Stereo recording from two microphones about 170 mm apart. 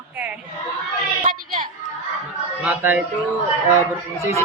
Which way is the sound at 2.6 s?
10° right (ahead or behind).